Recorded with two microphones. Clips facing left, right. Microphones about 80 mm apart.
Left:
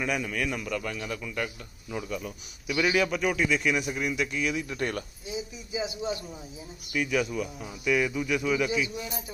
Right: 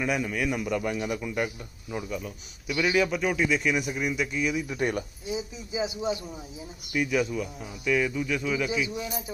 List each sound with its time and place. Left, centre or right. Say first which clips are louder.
0.0 s a man's voice: right 2 dB; centre
6.9 s a man's voice: right 1 dB; centre
8.6 s speech: even; centre